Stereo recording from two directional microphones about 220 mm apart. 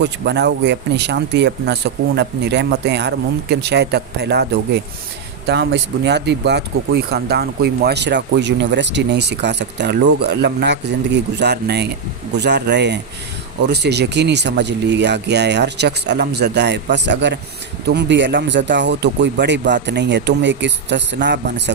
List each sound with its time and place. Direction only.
0.0 s speech: 50° right (ahead or behind)